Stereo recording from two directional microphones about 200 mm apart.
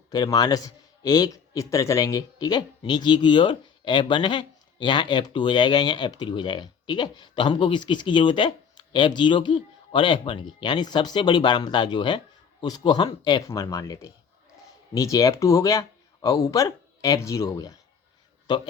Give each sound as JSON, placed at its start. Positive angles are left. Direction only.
{"t": 0.1, "sound": "a man's voice", "side_deg": 20}